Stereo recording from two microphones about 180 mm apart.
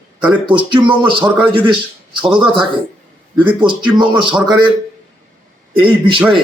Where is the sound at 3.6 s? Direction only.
25° right (ahead or behind).